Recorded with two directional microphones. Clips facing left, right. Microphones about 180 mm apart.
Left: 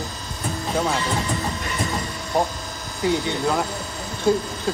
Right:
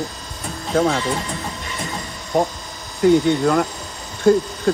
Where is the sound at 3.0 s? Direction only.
55° right (ahead or behind).